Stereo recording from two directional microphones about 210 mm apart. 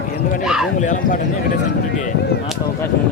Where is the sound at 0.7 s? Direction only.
35° left (ahead or behind).